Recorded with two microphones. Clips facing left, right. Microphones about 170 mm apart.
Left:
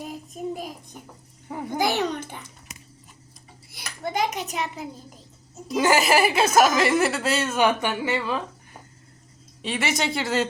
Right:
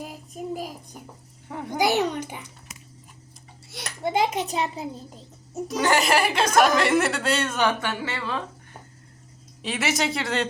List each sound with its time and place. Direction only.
0.0 s child singing: 5° right (ahead or behind)
1.5 s a woman's voice: 5° left (ahead or behind)
1.8 s a child's voice: 15° right (ahead or behind)
4.0 s a child's voice: 25° right (ahead or behind)
5.8 s a woman's voice: 5° left (ahead or behind)
9.6 s a woman's voice: centre (ahead or behind)